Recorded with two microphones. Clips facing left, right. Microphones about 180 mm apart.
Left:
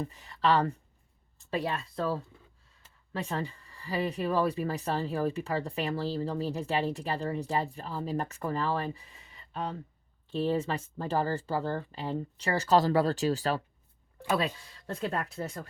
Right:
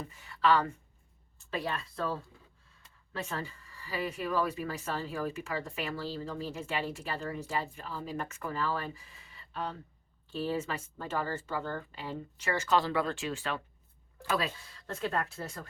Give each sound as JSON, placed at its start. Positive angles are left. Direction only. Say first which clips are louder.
{"t": 0.0, "sound": "speech", "louder": "left 1 dB", "side_deg": 35}